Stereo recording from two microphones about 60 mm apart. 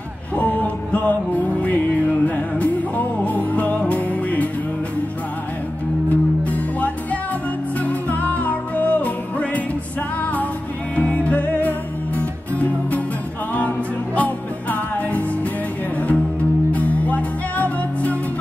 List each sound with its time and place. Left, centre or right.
0.4 s music: left
6.0 s music: left